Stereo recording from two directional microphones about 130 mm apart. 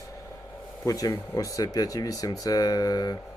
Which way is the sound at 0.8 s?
25° left (ahead or behind).